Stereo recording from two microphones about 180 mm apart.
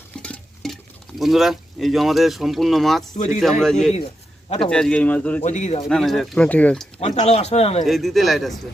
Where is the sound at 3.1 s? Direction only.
45° left (ahead or behind).